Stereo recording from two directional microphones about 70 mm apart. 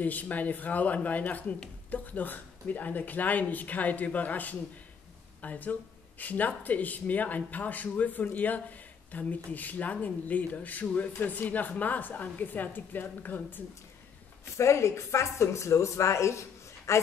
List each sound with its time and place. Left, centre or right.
0.0 s speech: left
14.6 s speech: left